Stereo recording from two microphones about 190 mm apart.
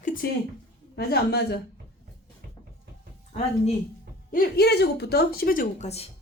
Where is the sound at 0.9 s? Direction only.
60° left (ahead or behind).